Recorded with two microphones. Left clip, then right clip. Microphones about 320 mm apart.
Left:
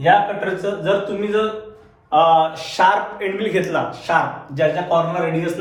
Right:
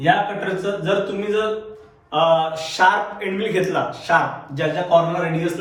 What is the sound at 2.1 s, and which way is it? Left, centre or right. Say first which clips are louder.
Speech: left 3 dB; centre.